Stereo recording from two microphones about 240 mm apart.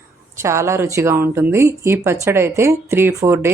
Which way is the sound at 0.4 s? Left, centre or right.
Centre.